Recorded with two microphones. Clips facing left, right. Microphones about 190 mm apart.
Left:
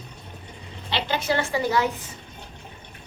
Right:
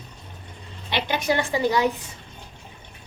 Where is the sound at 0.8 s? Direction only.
15° right (ahead or behind).